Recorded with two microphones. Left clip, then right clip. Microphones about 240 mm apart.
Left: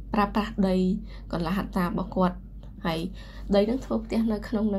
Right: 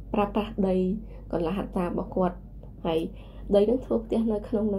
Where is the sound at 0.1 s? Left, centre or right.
Left.